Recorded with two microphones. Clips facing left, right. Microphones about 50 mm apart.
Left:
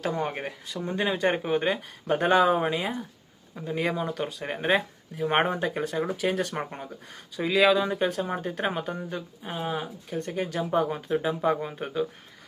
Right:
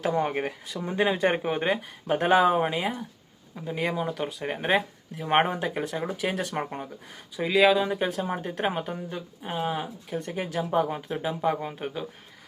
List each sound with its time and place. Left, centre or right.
0.0 s speech: centre
0.3 s speech: centre